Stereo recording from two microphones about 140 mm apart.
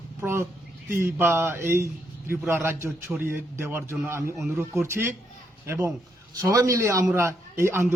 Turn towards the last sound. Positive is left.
turn(degrees=-20)  # may be behind; listen again after turning